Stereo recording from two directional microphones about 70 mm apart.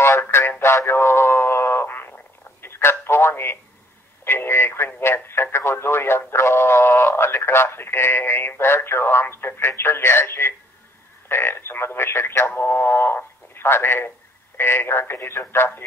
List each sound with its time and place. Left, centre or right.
0.2 s a sound: left
2.6 s telephone: left
4.2 s radio: left
11.2 s speech: left